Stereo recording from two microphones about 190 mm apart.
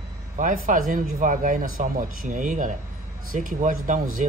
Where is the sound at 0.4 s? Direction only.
40° right (ahead or behind).